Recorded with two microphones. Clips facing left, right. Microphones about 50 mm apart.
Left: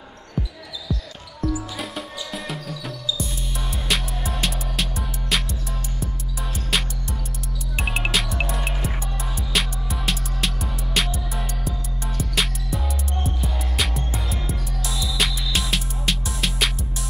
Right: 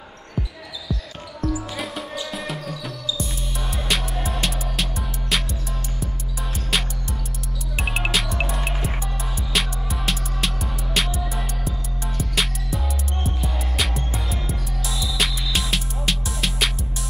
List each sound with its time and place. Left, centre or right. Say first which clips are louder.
1.4 s music: even; right
2.3 s music: right 1 dB; centre
6.7 s music: even; centre